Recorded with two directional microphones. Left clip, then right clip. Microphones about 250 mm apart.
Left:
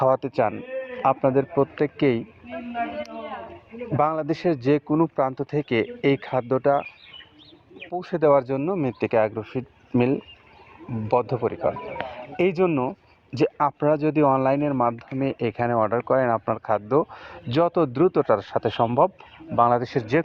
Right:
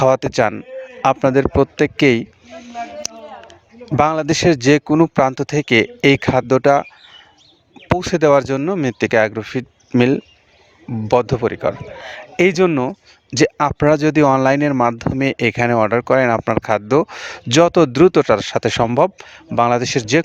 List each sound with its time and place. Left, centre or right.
0.0 s speech: right
3.9 s speech: right
7.9 s speech: right